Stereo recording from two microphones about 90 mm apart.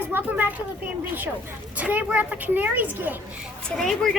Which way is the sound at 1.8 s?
15° right (ahead or behind).